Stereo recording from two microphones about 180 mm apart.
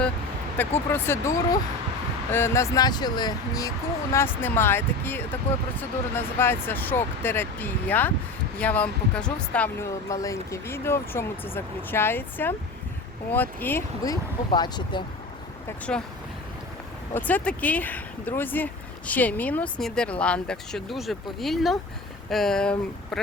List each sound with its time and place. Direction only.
0.5 s speech: 10° left (ahead or behind)
2.3 s speech: 15° left (ahead or behind)
15.9 s speech: 5° left (ahead or behind)
17.2 s speech: 10° left (ahead or behind)